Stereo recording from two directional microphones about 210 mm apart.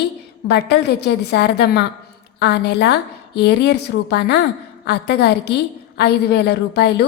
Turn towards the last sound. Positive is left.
turn(degrees=50)  # may be behind; listen again after turning